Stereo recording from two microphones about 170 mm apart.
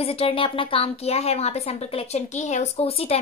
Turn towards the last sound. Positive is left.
turn(degrees=35)  # may be behind; listen again after turning